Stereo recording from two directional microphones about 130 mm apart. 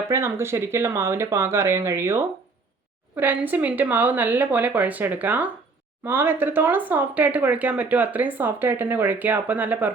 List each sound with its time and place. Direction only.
0.1 s speech: 20° right (ahead or behind)
3.2 s speech: 15° right (ahead or behind)